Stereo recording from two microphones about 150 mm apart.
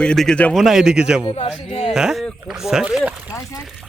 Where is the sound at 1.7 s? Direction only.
40° left (ahead or behind).